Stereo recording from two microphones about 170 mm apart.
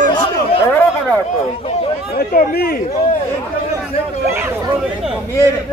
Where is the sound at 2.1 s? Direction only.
60° left (ahead or behind).